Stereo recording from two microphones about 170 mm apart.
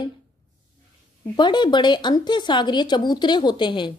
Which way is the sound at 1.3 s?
25° left (ahead or behind).